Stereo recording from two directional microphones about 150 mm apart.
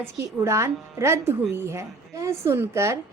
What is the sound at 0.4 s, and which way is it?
A woman's voice, 20° right (ahead or behind).